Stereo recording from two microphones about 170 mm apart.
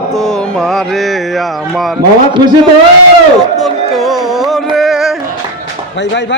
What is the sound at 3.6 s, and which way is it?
Music, centre (ahead or behind).